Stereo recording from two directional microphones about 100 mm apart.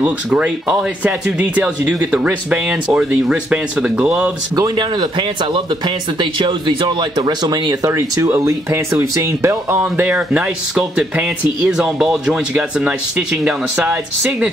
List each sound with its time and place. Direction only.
0.7 s speech: 10° right (ahead or behind)
4.6 s speech: 45° right (ahead or behind)
7.9 s speech: 30° right (ahead or behind)
9.8 s speech: 15° right (ahead or behind)